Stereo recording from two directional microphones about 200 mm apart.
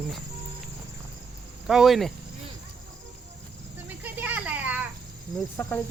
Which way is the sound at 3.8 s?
10° right (ahead or behind).